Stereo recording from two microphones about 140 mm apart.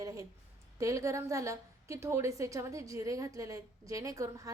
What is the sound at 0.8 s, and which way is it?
A woman's voice, 20° right (ahead or behind).